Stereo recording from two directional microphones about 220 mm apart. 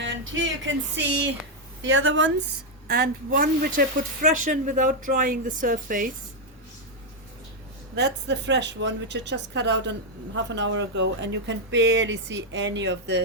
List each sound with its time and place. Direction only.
0.0 s a sound: 60° right (ahead or behind)
1.8 s speech: 60° right (ahead or behind)
2.9 s speech: 40° right (ahead or behind)
7.9 s a woman's voice: 50° right (ahead or behind)